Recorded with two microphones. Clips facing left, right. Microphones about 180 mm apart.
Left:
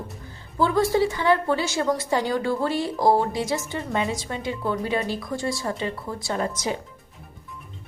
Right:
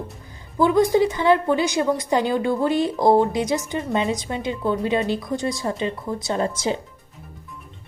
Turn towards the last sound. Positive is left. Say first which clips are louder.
# right 3 dB
turn(degrees=-25)  # may be behind; listen again after turning